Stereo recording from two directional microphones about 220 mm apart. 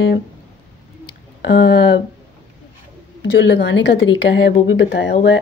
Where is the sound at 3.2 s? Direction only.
55° left (ahead or behind).